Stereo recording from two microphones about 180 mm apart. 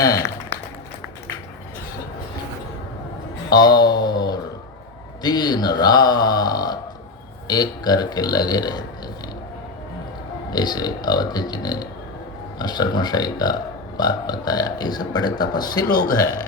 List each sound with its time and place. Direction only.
0.0 s speech: 20° left (ahead or behind)
3.5 s mantra: 25° left (ahead or behind)
5.2 s speech: 25° left (ahead or behind)
10.5 s speech: 25° left (ahead or behind)